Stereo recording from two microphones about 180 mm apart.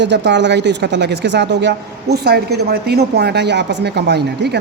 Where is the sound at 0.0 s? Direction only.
75° right (ahead or behind).